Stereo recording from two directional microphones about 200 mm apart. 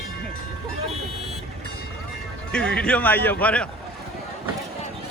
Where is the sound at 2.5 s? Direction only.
5° left (ahead or behind).